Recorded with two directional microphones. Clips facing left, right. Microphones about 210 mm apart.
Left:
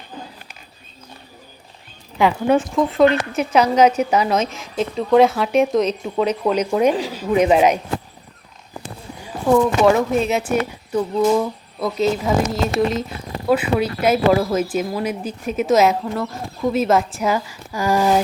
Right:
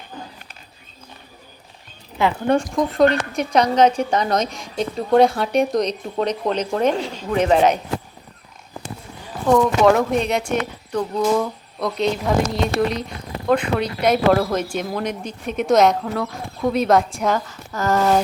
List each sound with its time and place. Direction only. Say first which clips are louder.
2.1 s speech: left 2 dB; 15° left (ahead or behind)
9.5 s speech: even; 5° left (ahead or behind)